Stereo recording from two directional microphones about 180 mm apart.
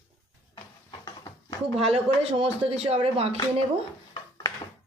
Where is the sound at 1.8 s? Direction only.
35° right (ahead or behind).